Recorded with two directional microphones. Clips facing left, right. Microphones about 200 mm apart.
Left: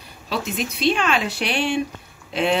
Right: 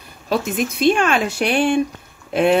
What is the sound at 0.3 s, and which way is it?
Speech, 50° right (ahead or behind).